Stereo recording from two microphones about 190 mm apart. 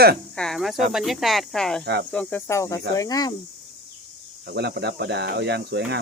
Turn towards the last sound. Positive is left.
turn(degrees=-60)  # may be behind; listen again after turning